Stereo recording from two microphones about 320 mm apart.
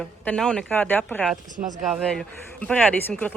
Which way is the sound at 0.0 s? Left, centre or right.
Centre.